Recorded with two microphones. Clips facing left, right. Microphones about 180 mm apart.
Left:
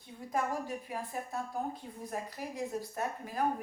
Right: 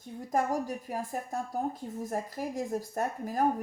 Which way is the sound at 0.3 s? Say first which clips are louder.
Right 4 dB; 45° right (ahead or behind).